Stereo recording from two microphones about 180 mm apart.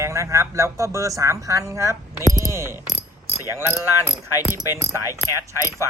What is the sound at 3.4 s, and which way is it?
Speech, 15° right (ahead or behind).